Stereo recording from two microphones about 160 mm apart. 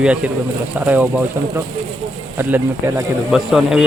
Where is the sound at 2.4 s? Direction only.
15° right (ahead or behind).